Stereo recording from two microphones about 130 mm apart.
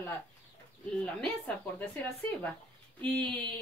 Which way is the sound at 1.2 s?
5° left (ahead or behind).